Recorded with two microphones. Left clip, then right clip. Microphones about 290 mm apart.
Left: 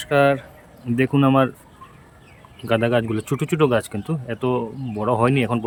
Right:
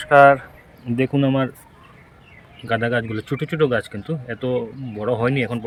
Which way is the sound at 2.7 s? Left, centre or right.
Centre.